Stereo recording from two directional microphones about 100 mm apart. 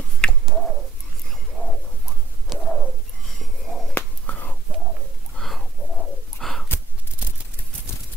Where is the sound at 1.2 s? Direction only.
10° left (ahead or behind).